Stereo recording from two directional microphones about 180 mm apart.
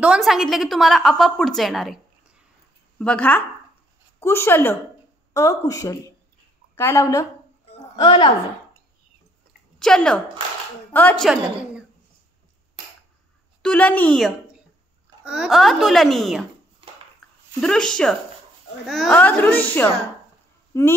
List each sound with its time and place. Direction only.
0.0 s a woman's voice: 5° right (ahead or behind)
3.0 s a woman's voice: 5° left (ahead or behind); by 8.3 s 25° left (ahead or behind)
9.8 s a woman's voice: 5° left (ahead or behind)
13.6 s a woman's voice: 5° left (ahead or behind)
16.8 s a sound: 30° right (ahead or behind)
17.6 s a woman's voice: 5° left (ahead or behind)